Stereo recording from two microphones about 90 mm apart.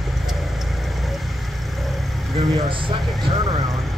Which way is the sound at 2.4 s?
70° right (ahead or behind).